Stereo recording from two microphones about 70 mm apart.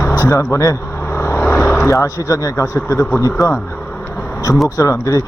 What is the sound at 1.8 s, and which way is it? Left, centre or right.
Speech, left.